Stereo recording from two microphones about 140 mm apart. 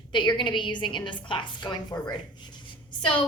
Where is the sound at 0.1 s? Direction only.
35° left (ahead or behind).